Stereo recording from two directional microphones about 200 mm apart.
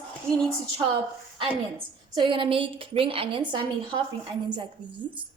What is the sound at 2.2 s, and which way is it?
A woman's voice, 25° right (ahead or behind).